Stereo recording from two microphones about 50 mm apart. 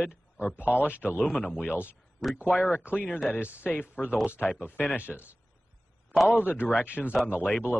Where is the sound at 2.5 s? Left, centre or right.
Left.